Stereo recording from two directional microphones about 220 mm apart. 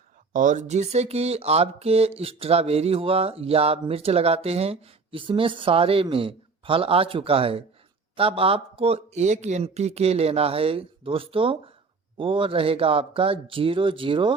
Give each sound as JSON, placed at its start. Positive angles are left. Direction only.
{"t": 0.3, "sound": "speech", "side_deg": -35}